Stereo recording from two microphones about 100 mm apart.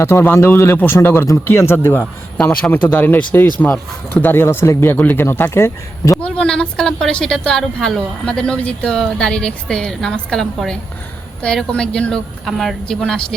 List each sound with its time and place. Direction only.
0.0 s a man's voice: 25° left (ahead or behind)
6.2 s a woman's voice: 10° left (ahead or behind)